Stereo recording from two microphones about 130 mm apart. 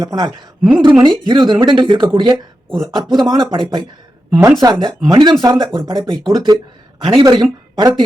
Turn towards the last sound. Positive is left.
turn(degrees=-35)  # may be behind; listen again after turning